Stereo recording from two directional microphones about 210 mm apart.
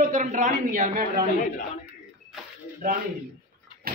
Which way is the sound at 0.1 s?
35° right (ahead or behind).